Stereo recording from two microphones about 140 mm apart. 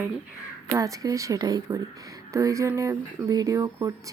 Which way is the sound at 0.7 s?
25° right (ahead or behind).